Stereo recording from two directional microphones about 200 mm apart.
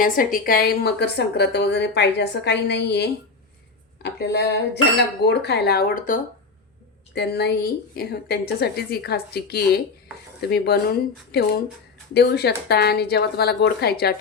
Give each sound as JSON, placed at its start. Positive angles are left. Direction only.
{"t": 0.0, "sound": "a woman's voice", "side_deg": 45}
{"t": 7.1, "sound": "a woman's voice", "side_deg": 55}